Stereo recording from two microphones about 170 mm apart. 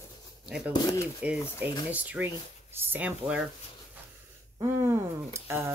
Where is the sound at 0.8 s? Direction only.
15° left (ahead or behind).